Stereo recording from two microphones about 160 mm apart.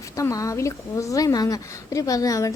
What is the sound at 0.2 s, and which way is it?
A woman's voice, 20° left (ahead or behind).